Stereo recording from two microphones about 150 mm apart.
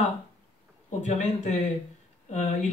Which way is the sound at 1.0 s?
55° left (ahead or behind).